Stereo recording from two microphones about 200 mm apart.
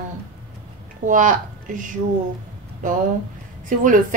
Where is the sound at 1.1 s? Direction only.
40° right (ahead or behind).